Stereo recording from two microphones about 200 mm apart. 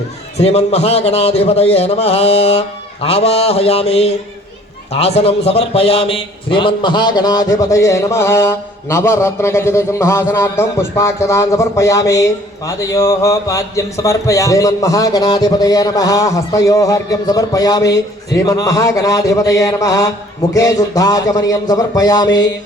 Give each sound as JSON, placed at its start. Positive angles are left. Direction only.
{"t": 0.3, "sound": "a man's voice", "side_deg": 30}